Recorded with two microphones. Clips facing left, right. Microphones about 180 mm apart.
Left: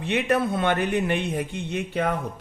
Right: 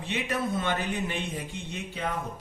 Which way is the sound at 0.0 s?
60° left (ahead or behind).